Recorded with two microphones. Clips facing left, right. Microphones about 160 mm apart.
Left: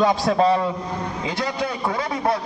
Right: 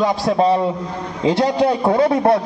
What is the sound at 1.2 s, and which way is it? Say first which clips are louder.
Speech: right 12 dB; 35° right (ahead or behind).